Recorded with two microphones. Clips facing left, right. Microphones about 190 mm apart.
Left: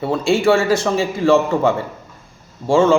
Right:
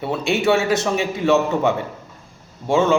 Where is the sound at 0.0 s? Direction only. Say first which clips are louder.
Left 4 dB; centre (ahead or behind).